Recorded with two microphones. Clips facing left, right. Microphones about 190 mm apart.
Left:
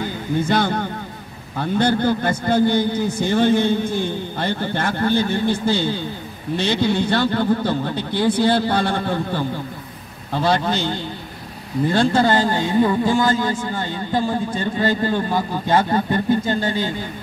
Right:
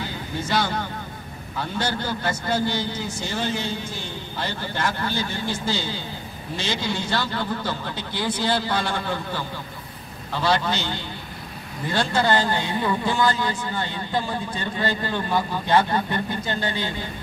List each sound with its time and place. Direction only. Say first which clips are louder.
0.0 s a man's voice: left 8 dB; 55° left (ahead or behind)